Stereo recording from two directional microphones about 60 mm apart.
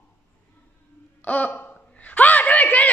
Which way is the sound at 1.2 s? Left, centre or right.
Left.